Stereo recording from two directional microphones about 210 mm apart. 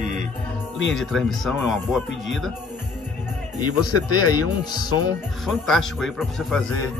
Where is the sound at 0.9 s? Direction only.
Centre (ahead or behind).